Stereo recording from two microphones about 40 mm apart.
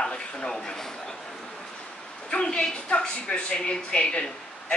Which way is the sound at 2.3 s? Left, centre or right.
Left.